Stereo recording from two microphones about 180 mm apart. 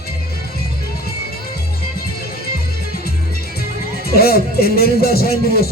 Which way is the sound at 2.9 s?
60° left (ahead or behind).